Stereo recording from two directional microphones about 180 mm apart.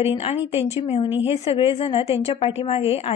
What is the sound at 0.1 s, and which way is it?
A woman's voice, 30° left (ahead or behind).